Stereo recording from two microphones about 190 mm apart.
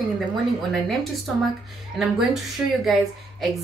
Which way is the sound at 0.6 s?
Centre (ahead or behind).